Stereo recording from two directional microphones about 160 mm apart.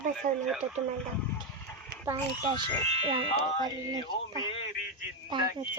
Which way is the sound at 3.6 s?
25° right (ahead or behind).